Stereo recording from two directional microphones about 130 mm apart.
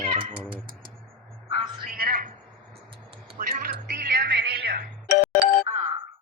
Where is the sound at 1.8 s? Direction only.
90° right.